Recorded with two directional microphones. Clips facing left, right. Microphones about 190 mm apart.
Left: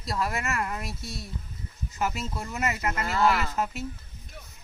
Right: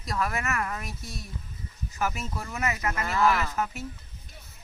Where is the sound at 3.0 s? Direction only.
35° left (ahead or behind).